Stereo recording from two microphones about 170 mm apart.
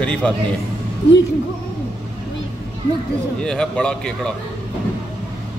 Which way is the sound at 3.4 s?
5° left (ahead or behind).